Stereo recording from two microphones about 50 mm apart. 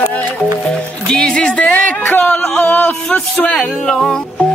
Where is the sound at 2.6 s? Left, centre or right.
Left.